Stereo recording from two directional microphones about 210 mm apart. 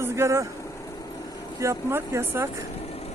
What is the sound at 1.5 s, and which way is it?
Speech, 15° right (ahead or behind).